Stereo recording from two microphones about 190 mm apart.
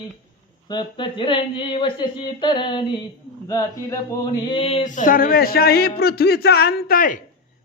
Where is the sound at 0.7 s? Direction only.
25° left (ahead or behind).